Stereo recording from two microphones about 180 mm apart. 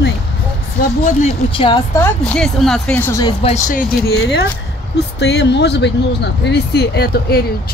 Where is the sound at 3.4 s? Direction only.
40° left (ahead or behind).